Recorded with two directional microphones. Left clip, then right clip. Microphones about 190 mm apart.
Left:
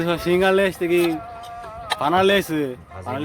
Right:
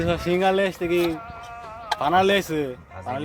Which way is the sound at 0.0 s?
Centre (ahead or behind).